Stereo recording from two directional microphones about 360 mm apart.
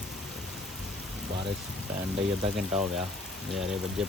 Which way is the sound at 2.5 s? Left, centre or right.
Centre.